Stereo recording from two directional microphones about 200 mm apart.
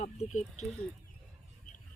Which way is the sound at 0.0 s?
35° left (ahead or behind).